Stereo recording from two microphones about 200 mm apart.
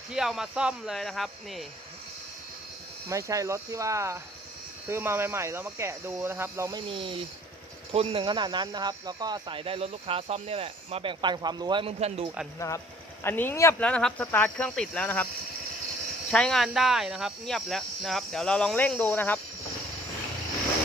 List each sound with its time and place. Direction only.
0.1 s speech: 5° right (ahead or behind)
3.1 s speech: 15° right (ahead or behind); by 12.3 s 30° right (ahead or behind)
12.5 s speech: 15° left (ahead or behind)
16.3 s speech: 5° left (ahead or behind)